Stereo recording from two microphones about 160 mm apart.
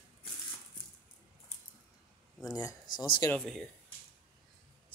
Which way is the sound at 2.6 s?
25° left (ahead or behind).